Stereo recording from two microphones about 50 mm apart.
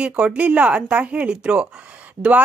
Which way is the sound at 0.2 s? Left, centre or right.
Right.